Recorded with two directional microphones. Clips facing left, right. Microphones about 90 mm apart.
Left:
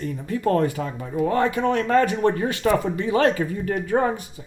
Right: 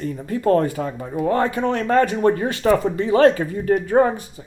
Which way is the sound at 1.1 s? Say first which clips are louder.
Right 1 dB; 50° right (ahead or behind).